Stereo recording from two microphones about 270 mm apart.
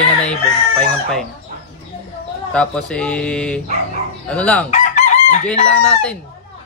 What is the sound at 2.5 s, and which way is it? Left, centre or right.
Speech, centre.